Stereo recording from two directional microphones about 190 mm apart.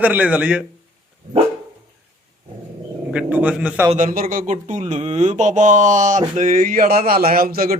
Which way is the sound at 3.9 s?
45° right (ahead or behind).